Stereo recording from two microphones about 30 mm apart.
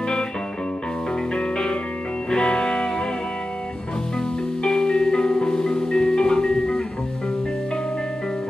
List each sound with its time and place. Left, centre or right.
1.3 s music: left
4.6 s music: left